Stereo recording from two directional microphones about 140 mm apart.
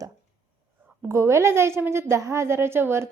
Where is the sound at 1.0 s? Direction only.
20° right (ahead or behind).